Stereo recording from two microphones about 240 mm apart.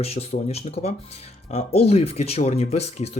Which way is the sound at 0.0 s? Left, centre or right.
Left.